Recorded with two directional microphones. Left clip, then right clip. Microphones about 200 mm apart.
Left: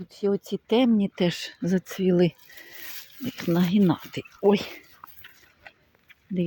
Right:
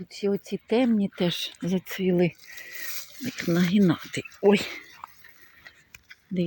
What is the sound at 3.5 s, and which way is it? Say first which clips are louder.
Speech: even; centre (ahead or behind).